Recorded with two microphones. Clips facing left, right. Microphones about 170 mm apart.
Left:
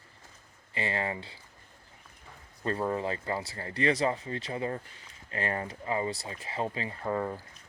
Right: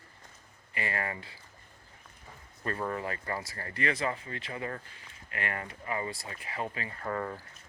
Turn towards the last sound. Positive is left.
turn(degrees=15)  # may be behind; listen again after turning